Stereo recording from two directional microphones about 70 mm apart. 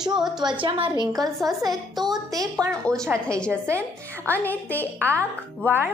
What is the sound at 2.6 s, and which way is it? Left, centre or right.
Speech, centre.